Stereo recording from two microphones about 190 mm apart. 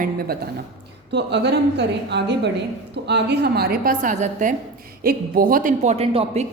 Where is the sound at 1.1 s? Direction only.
65° right (ahead or behind); by 6.4 s 30° right (ahead or behind).